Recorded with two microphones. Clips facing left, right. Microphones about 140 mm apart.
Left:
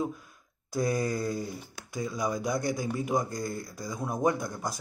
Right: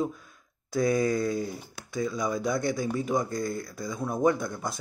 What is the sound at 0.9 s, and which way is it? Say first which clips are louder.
Speech: right 5 dB; 5° left (ahead or behind).